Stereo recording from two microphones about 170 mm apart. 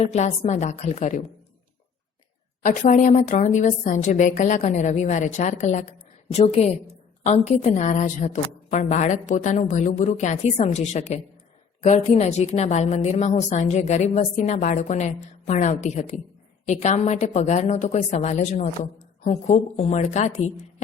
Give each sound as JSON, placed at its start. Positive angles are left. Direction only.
{"t": 0.0, "sound": "a woman's voice", "side_deg": 40}
{"t": 2.6, "sound": "a woman's voice", "side_deg": 50}